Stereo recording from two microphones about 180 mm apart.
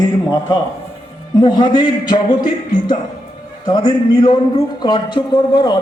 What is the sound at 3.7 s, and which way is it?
Speech, 25° left (ahead or behind).